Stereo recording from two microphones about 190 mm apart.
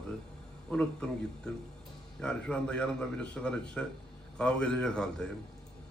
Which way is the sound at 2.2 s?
5° left (ahead or behind).